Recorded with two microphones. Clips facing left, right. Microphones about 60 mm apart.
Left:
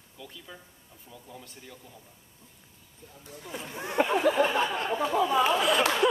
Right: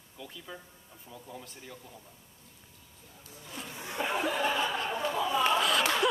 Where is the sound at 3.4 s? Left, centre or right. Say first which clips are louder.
Left 5 dB; left.